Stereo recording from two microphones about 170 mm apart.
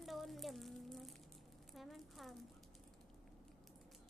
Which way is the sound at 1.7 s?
Centre (ahead or behind).